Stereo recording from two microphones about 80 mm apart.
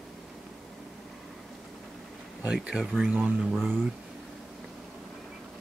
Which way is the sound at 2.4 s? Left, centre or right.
Centre.